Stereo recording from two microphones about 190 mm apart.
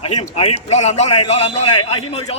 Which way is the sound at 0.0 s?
30° left (ahead or behind).